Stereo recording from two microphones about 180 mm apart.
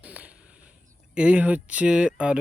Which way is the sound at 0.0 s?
5° right (ahead or behind).